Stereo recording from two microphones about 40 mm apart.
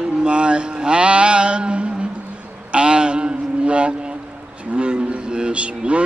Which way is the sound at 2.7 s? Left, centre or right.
Right.